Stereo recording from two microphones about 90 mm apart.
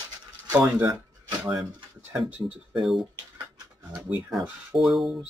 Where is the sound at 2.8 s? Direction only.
Centre (ahead or behind).